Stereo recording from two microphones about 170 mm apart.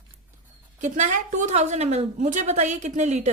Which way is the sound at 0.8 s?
45° right (ahead or behind).